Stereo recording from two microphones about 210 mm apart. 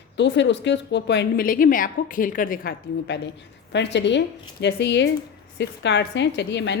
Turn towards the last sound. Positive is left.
turn(degrees=55)  # may be behind; listen again after turning